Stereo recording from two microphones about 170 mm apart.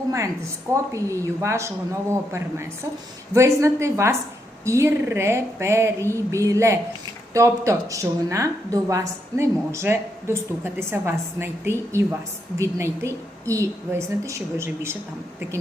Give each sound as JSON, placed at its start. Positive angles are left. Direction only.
{"t": 0.7, "sound": "a woman's voice", "side_deg": -15}